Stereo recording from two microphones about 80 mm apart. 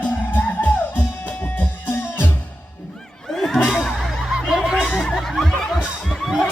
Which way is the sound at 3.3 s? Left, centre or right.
Centre.